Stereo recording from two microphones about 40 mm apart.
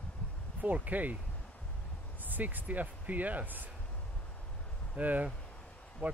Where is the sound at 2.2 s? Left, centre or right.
Right.